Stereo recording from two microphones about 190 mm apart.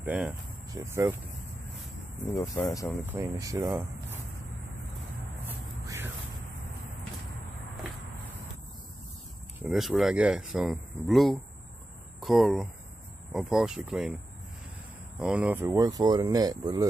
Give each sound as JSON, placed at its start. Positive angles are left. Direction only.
{"t": 0.0, "sound": "speech", "side_deg": -5}
{"t": 2.3, "sound": "speech", "side_deg": 15}
{"t": 3.1, "sound": "speech", "side_deg": -15}
{"t": 5.5, "sound": "a sound", "side_deg": -10}
{"t": 9.6, "sound": "speech", "side_deg": 0}
{"t": 15.1, "sound": "speech", "side_deg": -5}